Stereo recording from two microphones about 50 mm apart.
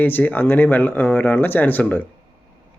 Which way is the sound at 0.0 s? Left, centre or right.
Left.